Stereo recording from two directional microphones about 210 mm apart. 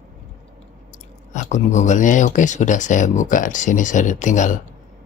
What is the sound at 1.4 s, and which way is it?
Speech, 35° left (ahead or behind).